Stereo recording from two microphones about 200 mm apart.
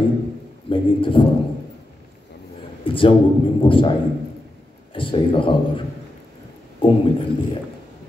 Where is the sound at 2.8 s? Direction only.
25° left (ahead or behind).